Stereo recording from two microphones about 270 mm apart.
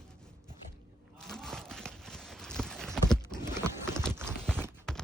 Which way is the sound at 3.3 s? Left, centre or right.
Centre.